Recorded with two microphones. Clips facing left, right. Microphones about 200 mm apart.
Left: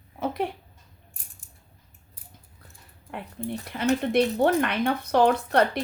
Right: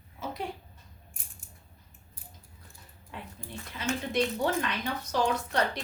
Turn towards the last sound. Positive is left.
turn(degrees=60)  # may be behind; listen again after turning